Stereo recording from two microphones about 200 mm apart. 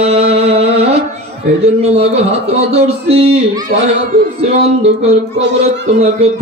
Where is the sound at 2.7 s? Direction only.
30° right (ahead or behind).